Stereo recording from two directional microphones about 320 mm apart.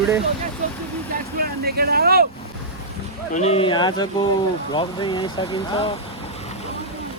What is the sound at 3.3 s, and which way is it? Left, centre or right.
Speech, centre.